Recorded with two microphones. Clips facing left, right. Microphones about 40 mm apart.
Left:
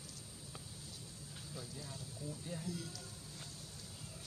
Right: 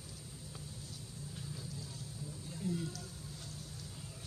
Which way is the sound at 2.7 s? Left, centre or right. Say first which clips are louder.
Right 8 dB; right.